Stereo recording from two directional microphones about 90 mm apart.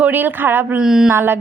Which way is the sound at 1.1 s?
25° right (ahead or behind).